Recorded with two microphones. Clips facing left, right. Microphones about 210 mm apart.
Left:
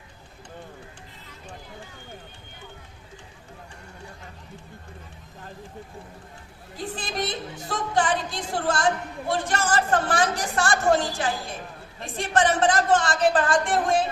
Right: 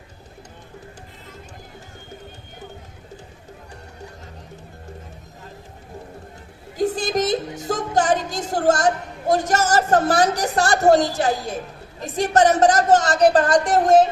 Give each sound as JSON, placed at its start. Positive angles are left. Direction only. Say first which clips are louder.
{"t": 6.7, "sound": "speech", "louder": "right 10 dB", "side_deg": -45}